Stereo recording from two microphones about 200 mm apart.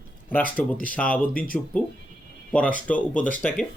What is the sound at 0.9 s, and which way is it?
Speech, 5° left (ahead or behind).